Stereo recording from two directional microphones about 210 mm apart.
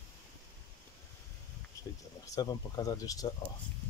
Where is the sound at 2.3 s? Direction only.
20° left (ahead or behind).